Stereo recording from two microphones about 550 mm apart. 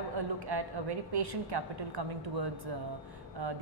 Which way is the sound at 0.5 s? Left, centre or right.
Right.